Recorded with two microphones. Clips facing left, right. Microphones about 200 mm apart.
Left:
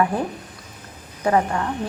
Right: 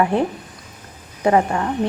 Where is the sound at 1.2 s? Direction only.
20° right (ahead or behind).